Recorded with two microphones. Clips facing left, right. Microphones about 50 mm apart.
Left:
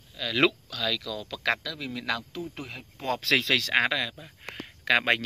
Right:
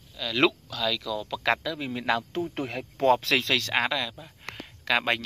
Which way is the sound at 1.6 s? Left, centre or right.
Right.